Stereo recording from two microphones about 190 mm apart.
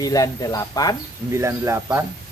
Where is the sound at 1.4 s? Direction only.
15° right (ahead or behind).